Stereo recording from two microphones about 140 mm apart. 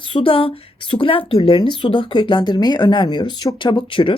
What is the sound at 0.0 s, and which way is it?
Speech, 40° left (ahead or behind).